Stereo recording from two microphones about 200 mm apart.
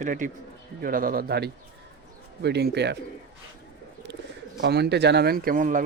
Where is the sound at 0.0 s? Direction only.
40° right (ahead or behind); by 3.0 s 55° right (ahead or behind).